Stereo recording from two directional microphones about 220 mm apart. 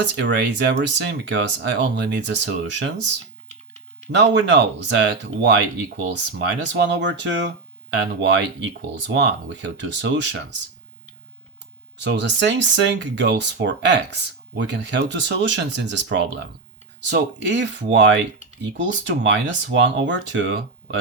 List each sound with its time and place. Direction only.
0.0 s speech: 55° right (ahead or behind)
4.1 s speech: 55° right (ahead or behind)
11.9 s speech: 50° right (ahead or behind)